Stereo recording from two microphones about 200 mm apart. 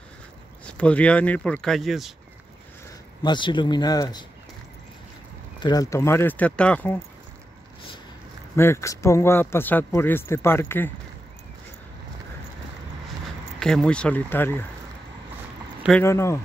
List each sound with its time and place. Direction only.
0.7 s speech: 5° left (ahead or behind)
3.2 s speech: 25° left (ahead or behind)
5.6 s speech: 20° left (ahead or behind)
8.5 s speech: 15° left (ahead or behind)
13.6 s speech: 5° left (ahead or behind)
16.0 s speech: 15° left (ahead or behind)